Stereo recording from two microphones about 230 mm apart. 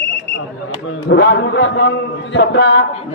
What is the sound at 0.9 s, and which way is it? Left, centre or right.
A man's voice, left.